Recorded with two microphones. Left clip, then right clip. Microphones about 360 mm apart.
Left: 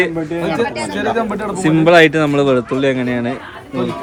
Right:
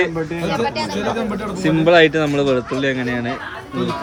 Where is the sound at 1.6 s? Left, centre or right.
Centre.